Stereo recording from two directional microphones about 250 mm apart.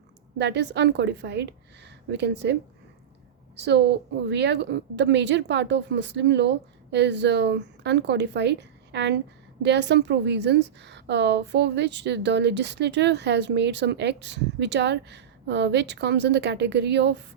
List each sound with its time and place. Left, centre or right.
0.3 s a woman's voice: right